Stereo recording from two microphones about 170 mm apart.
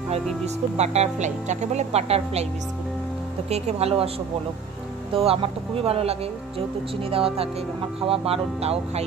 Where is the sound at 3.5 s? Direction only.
40° right (ahead or behind).